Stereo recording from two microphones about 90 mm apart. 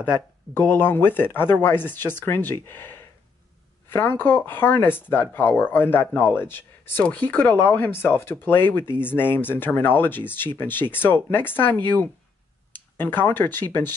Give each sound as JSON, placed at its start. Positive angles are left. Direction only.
{"t": 0.6, "sound": "speech", "side_deg": 20}